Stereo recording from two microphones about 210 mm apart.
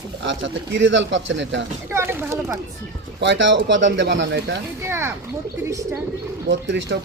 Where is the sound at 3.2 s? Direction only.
60° right (ahead or behind).